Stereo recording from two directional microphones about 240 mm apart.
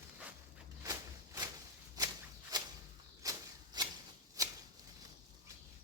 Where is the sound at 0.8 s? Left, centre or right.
Centre.